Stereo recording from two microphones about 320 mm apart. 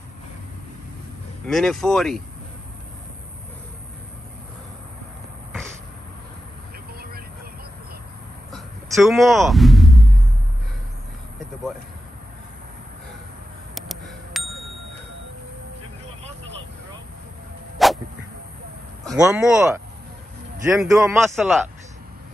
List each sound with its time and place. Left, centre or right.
1.5 s a man's voice: centre
6.9 s vehicle: right
8.9 s speech: centre
13.7 s a sound: centre
17.8 s whip: centre
19.0 s a man's voice: centre